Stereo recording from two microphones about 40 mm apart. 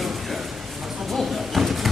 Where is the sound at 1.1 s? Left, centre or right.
Centre.